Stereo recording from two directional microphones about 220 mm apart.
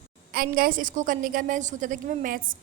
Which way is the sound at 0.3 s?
40° right (ahead or behind).